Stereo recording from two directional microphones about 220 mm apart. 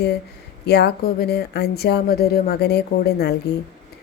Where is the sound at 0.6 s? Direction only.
50° left (ahead or behind).